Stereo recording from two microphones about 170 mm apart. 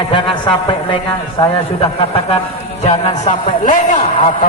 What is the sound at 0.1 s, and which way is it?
A man's voice, 30° left (ahead or behind).